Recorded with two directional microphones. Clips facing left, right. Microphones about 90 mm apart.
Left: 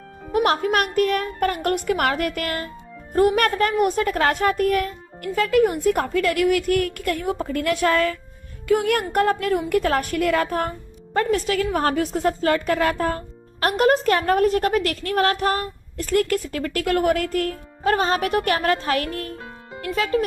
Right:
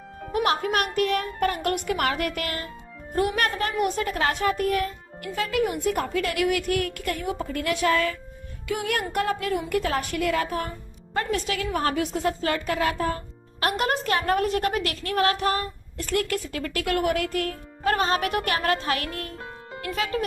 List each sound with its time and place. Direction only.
0.3 s a woman's voice: 40° left (ahead or behind)